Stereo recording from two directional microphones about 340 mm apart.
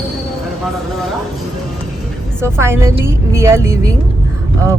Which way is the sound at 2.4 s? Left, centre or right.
Centre.